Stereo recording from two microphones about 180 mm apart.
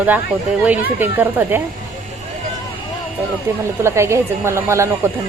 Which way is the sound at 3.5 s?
15° right (ahead or behind).